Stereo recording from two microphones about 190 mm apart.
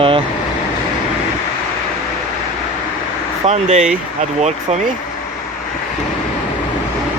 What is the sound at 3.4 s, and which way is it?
Speech, 35° right (ahead or behind).